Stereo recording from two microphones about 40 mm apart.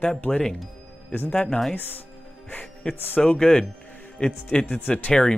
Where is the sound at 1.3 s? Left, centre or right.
Left.